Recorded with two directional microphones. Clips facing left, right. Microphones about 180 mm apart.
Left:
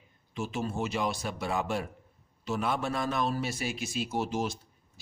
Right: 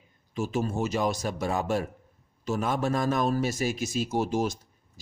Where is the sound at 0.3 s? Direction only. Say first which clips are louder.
Right 5 dB; 45° right (ahead or behind).